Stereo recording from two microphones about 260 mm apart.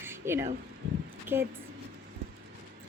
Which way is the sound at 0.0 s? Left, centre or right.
Centre.